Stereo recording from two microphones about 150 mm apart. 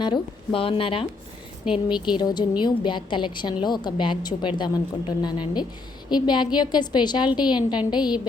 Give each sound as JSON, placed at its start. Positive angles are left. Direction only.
{"t": 0.0, "sound": "a woman's voice", "side_deg": 35}